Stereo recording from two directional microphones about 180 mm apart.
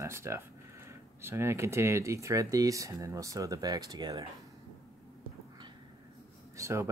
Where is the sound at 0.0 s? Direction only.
15° right (ahead or behind).